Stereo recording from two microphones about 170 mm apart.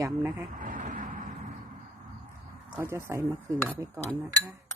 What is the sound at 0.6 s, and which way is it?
Vehicle, 50° right (ahead or behind).